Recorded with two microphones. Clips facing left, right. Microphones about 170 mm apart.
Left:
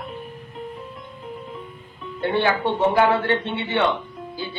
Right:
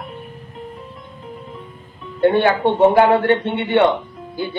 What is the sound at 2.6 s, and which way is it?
Speech, 50° right (ahead or behind).